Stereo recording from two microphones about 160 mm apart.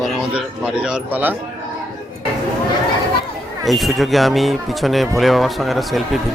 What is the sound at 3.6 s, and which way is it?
Speech, centre (ahead or behind).